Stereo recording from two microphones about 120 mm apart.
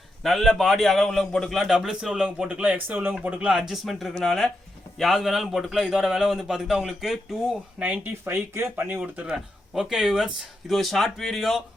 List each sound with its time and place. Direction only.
0.2 s a man's voice: centre (ahead or behind); by 9.0 s 15° right (ahead or behind)
9.0 s a man's voice: 5° right (ahead or behind)